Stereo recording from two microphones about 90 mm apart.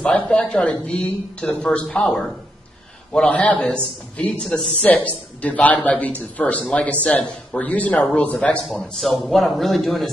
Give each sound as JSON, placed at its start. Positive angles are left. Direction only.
{"t": 0.0, "sound": "a man's voice", "side_deg": 15}